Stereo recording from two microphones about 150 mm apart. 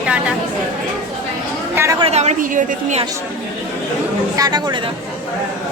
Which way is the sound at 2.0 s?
45° right (ahead or behind).